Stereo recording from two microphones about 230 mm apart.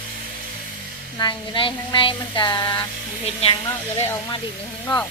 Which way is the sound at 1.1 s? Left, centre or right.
Centre.